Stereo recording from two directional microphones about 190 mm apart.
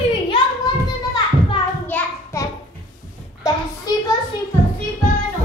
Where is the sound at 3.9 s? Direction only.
20° left (ahead or behind).